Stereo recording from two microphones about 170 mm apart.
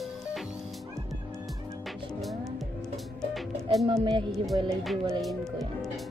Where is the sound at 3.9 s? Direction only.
30° right (ahead or behind).